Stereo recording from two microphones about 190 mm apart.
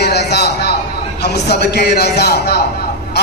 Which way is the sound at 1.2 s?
60° left (ahead or behind).